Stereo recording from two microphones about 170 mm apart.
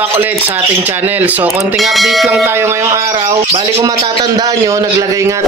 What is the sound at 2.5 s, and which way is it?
A man's voice, 15° right (ahead or behind).